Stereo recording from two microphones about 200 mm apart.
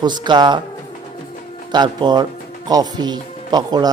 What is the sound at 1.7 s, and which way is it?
Speech, 20° right (ahead or behind).